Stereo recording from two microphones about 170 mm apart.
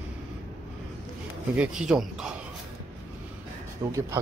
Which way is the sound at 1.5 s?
5° right (ahead or behind).